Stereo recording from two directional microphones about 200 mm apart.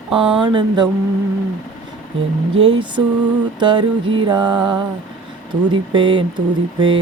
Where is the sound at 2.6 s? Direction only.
25° right (ahead or behind).